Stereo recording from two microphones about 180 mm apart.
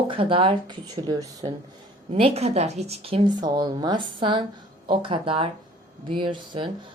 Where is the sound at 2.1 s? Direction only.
35° right (ahead or behind).